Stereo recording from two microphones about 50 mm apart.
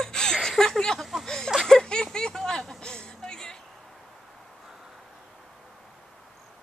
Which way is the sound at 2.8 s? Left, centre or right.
Centre.